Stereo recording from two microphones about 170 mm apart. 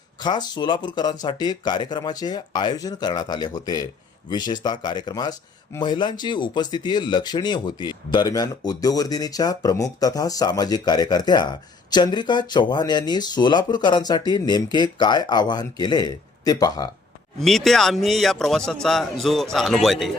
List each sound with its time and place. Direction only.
0.2 s speech: 25° left (ahead or behind)
17.4 s a man's voice: centre (ahead or behind)